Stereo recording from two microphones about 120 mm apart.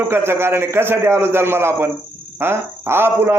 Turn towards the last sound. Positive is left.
turn(degrees=-20)  # may be behind; listen again after turning